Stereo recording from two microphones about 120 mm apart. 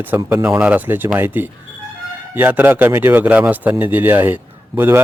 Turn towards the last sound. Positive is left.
turn(degrees=-20)  # may be behind; listen again after turning